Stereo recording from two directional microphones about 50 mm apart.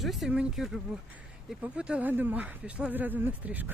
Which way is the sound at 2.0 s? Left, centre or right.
Right.